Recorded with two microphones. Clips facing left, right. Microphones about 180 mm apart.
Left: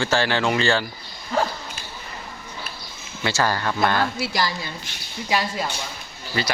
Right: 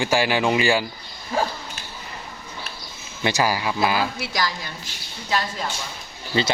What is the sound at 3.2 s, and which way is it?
Speech, 15° right (ahead or behind).